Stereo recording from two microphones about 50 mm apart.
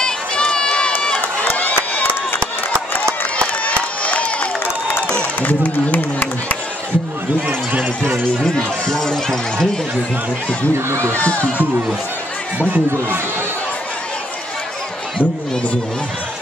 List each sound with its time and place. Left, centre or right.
0.0 s run: centre
1.4 s crowd: left
3.6 s a sound: left
5.4 s a man's voice: left
7.4 s speech: right
8.5 s speech: centre
10.9 s speech: right
11.1 s speech: left
12.5 s speech: right